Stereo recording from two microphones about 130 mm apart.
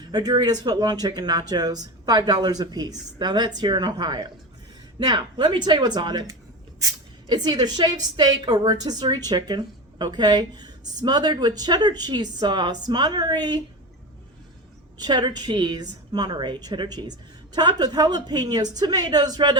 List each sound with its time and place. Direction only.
0.1 s a woman's voice: 30° right (ahead or behind)
14.9 s a woman's voice: 35° right (ahead or behind)